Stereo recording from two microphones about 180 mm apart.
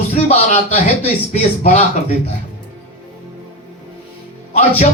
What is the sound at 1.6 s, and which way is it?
Speech, 40° left (ahead or behind).